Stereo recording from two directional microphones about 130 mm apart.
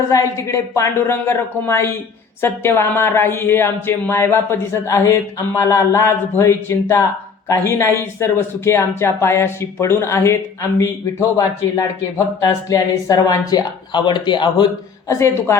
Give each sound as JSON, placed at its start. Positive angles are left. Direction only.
{"t": 0.1, "sound": "speech", "side_deg": 20}
{"t": 15.1, "sound": "speech", "side_deg": 20}